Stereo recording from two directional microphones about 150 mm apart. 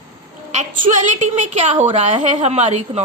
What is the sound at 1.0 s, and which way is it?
A woman's voice, 50° right (ahead or behind).